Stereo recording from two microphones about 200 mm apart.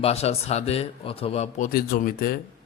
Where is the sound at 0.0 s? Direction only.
30° left (ahead or behind).